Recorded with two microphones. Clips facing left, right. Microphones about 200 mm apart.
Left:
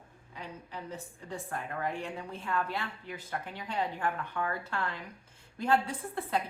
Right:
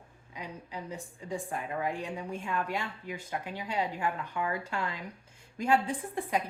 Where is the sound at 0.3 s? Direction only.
15° right (ahead or behind).